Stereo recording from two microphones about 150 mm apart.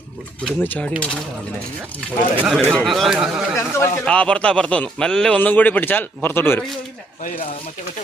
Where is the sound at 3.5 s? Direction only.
15° left (ahead or behind).